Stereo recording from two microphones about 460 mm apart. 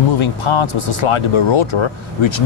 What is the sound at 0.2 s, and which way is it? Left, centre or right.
Speech, left.